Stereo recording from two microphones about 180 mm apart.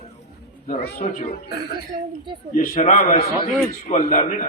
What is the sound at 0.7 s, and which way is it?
Speech, 55° left (ahead or behind).